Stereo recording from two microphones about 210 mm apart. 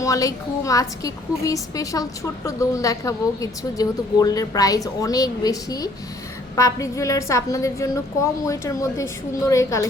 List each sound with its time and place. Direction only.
0.0 s a woman's voice: 15° left (ahead or behind)